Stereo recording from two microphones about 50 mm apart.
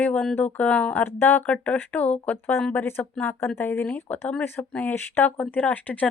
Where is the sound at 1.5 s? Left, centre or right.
Left.